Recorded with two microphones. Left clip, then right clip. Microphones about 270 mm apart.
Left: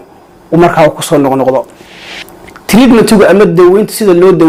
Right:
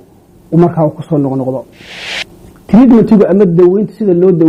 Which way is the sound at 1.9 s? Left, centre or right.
Centre.